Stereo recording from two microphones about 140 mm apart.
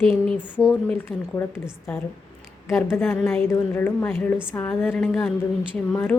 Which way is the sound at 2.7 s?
15° left (ahead or behind).